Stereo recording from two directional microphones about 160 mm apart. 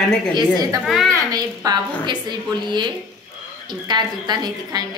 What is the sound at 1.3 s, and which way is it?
A woman's voice, 25° right (ahead or behind).